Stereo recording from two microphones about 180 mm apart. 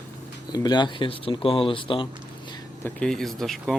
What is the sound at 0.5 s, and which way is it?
Speech, 25° left (ahead or behind).